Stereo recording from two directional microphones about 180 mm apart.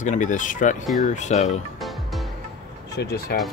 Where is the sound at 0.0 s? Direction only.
45° left (ahead or behind).